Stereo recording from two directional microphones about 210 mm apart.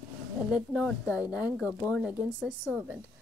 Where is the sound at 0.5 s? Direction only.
5° right (ahead or behind).